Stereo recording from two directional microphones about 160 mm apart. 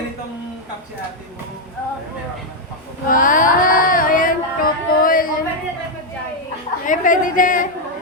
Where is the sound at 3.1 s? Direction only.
55° left (ahead or behind).